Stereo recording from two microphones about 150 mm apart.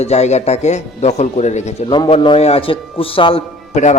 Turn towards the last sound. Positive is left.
turn(degrees=50)  # may be behind; listen again after turning